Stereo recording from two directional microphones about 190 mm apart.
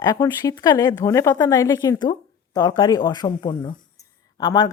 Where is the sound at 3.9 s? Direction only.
20° left (ahead or behind).